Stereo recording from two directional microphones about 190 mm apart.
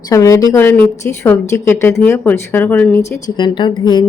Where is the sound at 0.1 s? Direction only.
15° left (ahead or behind).